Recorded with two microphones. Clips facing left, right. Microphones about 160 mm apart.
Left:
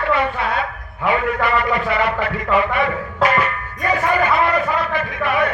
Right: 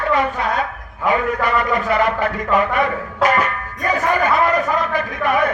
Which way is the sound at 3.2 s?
40° right (ahead or behind).